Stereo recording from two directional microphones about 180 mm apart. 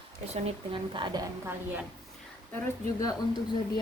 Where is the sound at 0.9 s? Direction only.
25° right (ahead or behind).